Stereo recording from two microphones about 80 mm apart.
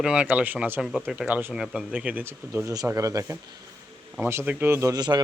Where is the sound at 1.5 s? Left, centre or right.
Centre.